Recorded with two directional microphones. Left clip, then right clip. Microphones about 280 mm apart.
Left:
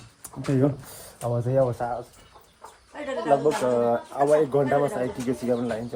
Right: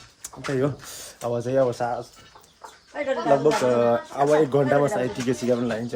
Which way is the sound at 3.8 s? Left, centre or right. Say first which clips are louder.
Right 2 dB; right.